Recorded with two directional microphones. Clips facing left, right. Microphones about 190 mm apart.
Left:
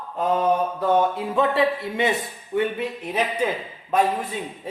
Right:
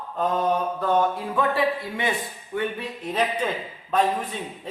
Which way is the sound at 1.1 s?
20° left (ahead or behind).